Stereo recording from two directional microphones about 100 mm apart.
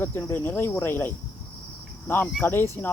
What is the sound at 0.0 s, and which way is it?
Speech, 20° left (ahead or behind).